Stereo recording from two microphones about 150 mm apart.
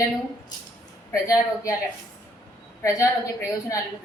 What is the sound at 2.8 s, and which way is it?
Speech, 20° left (ahead or behind).